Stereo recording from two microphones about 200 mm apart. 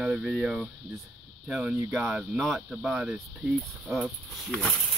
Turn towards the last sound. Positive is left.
turn(degrees=0)  # may be behind; listen again after turning